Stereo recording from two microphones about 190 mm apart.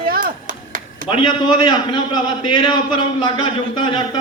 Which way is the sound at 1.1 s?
25° left (ahead or behind).